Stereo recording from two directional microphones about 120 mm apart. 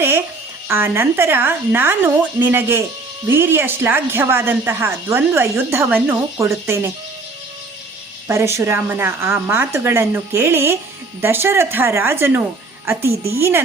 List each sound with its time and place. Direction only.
0.7 s speech: 20° right (ahead or behind)
8.3 s speech: 25° right (ahead or behind)